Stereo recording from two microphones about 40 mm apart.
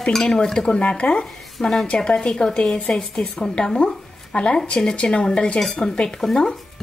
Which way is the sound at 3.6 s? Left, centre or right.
Centre.